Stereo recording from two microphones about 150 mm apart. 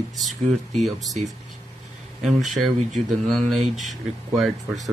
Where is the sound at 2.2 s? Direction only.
Centre (ahead or behind).